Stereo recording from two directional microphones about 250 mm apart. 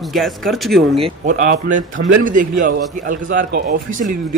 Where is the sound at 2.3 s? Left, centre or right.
Right.